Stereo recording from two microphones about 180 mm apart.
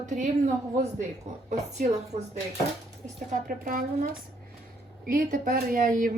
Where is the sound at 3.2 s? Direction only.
50° right (ahead or behind).